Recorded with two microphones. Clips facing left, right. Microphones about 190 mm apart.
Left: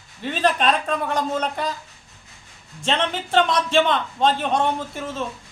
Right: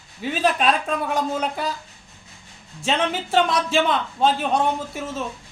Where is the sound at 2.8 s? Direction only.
5° right (ahead or behind).